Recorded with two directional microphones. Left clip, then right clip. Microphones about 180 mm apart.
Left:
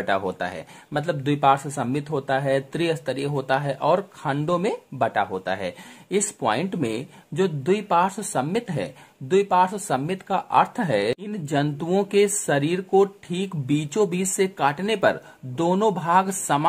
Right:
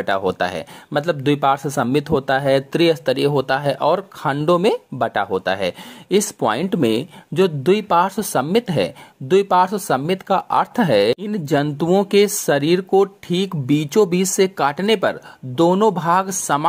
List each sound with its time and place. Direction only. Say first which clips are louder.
0.0 s speech: right 5 dB; 40° right (ahead or behind)